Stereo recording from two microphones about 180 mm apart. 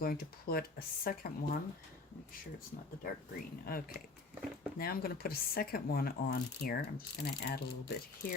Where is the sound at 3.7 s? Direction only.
55° left (ahead or behind).